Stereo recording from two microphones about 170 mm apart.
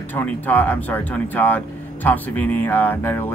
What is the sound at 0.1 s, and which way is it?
Speech, 10° left (ahead or behind).